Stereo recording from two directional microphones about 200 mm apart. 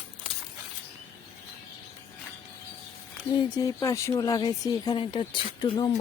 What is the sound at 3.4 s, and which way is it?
Speech, 20° left (ahead or behind).